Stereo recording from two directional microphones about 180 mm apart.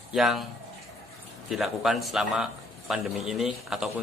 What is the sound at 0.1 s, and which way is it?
Speech, centre (ahead or behind).